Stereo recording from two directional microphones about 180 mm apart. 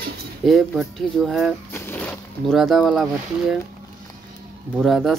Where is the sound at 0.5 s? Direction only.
Centre (ahead or behind).